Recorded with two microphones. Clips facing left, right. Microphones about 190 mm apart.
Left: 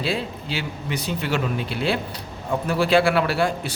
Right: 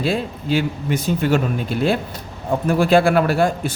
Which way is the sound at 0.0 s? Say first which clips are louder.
Right 4 dB; 50° right (ahead or behind).